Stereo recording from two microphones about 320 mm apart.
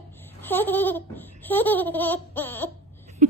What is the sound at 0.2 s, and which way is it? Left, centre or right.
Laughter, centre.